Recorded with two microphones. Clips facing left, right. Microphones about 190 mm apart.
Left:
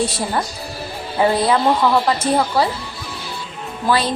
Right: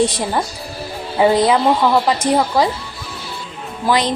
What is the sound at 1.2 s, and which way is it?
A woman's voice, 15° right (ahead or behind).